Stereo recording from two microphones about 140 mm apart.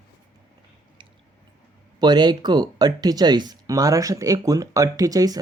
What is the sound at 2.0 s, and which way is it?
Speech, 30° right (ahead or behind).